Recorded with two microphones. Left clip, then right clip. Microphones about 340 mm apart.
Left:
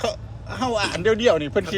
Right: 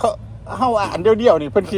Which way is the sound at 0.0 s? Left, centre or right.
Centre.